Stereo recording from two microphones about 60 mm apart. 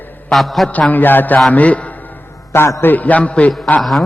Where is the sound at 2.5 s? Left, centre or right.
Left.